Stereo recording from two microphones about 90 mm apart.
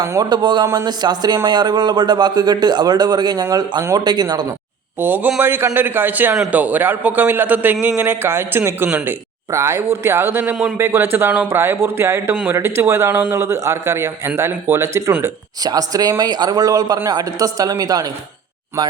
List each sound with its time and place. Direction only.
0.0 s a man's voice: 35° right (ahead or behind)
0.3 s speech: 55° right (ahead or behind)
4.9 s a man's voice: 20° right (ahead or behind)
10.5 s a man's voice: 5° right (ahead or behind)
10.8 s a man's voice: 25° right (ahead or behind); by 18.1 s 40° right (ahead or behind)